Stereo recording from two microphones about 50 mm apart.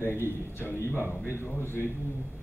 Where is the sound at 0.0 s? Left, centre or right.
Left.